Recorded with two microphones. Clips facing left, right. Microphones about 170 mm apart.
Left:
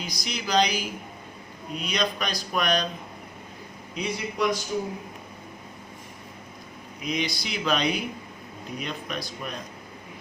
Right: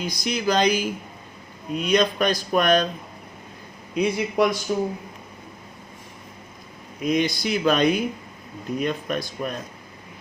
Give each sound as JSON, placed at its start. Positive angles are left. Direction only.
{"t": 0.0, "sound": "speech", "side_deg": -50}
{"t": 3.9, "sound": "speech", "side_deg": -55}
{"t": 7.0, "sound": "speech", "side_deg": -50}